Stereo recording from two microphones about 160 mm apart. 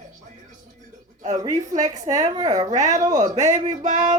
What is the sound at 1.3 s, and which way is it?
Speech, 25° right (ahead or behind).